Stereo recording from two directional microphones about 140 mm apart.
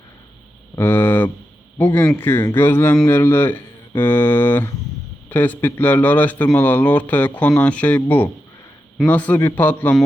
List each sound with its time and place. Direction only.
0.8 s a man's voice: 15° left (ahead or behind)